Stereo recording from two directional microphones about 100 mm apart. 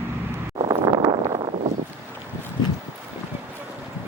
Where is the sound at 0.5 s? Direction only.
45° right (ahead or behind).